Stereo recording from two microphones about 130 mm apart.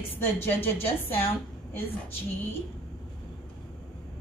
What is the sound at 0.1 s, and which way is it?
A woman's voice, 15° left (ahead or behind).